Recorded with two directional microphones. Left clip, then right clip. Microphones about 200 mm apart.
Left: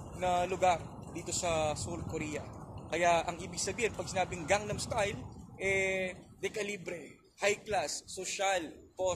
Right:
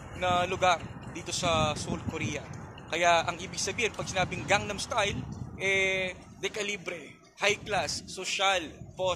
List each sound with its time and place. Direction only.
0.2 s a man's voice: 10° right (ahead or behind)